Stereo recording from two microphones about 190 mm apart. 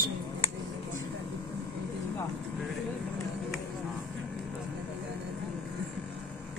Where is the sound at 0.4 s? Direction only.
30° left (ahead or behind).